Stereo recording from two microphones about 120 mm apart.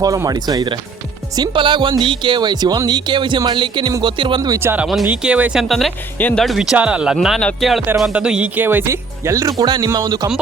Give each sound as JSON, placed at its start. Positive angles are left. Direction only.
{"t": 0.0, "sound": "speech", "side_deg": -30}
{"t": 4.6, "sound": "speech", "side_deg": -15}
{"t": 6.1, "sound": "speech", "side_deg": 15}
{"t": 6.4, "sound": "speech", "side_deg": 0}